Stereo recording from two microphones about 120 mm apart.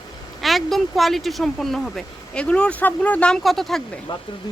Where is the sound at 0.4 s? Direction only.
Centre (ahead or behind).